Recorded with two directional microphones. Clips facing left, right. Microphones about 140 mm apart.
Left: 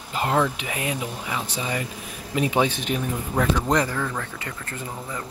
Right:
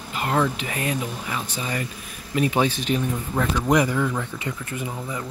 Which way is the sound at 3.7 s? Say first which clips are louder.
Right 3 dB; 10° right (ahead or behind).